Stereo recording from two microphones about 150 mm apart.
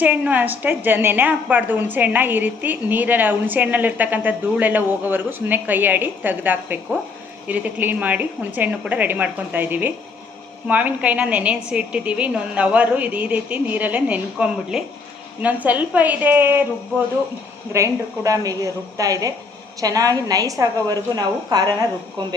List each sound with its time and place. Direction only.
0.0 s a woman's voice: 10° right (ahead or behind)
17.7 s a woman's voice: 20° right (ahead or behind)